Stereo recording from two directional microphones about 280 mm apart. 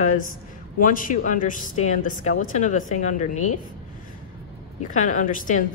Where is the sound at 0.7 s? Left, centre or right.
Left.